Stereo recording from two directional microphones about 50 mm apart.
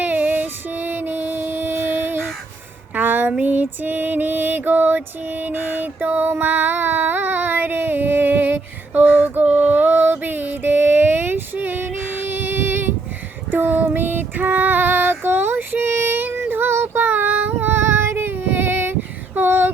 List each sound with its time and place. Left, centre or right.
0.0 s music: right
2.9 s a sound: right
3.4 s music: right
13.5 s female singing: right